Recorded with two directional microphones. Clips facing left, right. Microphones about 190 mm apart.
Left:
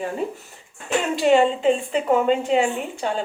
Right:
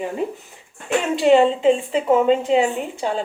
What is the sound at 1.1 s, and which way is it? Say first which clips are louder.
A woman's voice: right 3 dB; 25° right (ahead or behind).